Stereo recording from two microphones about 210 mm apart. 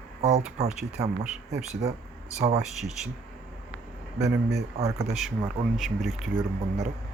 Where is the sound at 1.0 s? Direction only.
15° right (ahead or behind).